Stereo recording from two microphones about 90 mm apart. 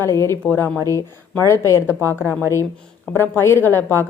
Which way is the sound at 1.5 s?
30° left (ahead or behind).